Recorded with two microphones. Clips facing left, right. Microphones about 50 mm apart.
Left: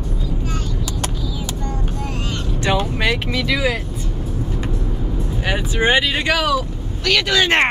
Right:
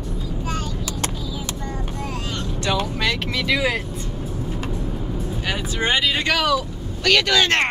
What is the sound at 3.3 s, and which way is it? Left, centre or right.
Speech, centre.